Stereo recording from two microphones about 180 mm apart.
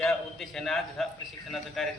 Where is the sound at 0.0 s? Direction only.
5° left (ahead or behind).